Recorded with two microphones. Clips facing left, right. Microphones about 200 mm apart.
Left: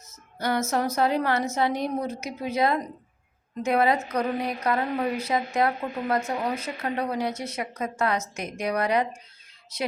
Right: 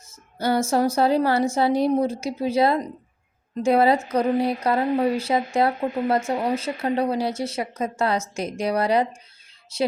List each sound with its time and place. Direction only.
0.1 s a woman's voice: 30° right (ahead or behind)